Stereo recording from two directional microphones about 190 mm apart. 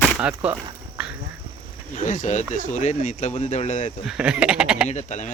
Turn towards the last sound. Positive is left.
turn(degrees=35)  # may be behind; listen again after turning